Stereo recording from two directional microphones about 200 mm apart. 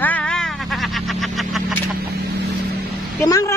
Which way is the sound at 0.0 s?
5° left (ahead or behind).